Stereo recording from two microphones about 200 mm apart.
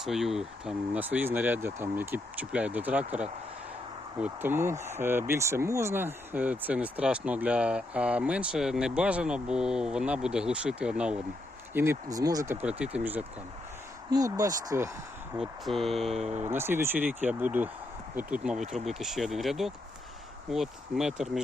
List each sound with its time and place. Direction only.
0.0 s speech: centre (ahead or behind); by 14.8 s 15° right (ahead or behind)
15.4 s speech: centre (ahead or behind)